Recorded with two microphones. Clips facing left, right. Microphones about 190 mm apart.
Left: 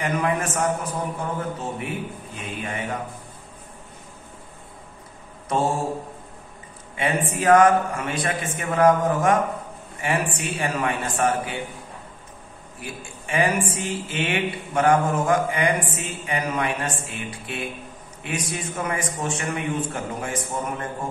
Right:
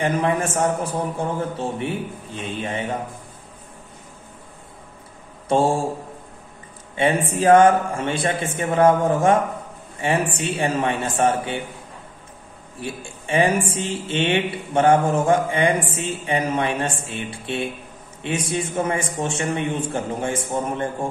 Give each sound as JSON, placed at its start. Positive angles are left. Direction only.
{"t": 0.0, "sound": "a woman's voice", "side_deg": -30}
{"t": 7.0, "sound": "a woman's voice", "side_deg": -30}
{"t": 12.8, "sound": "a woman's voice", "side_deg": -30}